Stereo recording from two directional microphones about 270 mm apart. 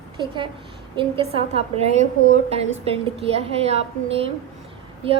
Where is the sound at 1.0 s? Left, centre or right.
Right.